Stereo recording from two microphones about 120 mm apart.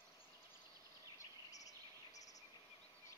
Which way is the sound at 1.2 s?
30° left (ahead or behind).